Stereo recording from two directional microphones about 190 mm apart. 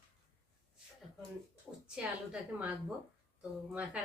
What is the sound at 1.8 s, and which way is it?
Speech, 5° right (ahead or behind).